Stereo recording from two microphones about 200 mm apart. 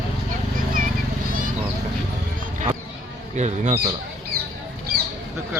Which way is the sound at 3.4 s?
35° right (ahead or behind).